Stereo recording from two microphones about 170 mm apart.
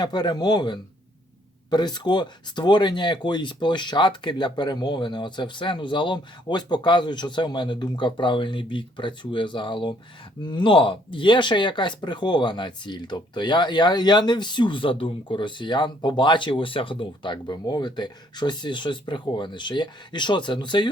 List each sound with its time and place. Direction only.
0.0 s speech: 25° left (ahead or behind)